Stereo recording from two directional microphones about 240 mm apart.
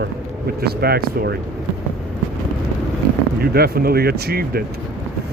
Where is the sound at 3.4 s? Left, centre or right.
Right.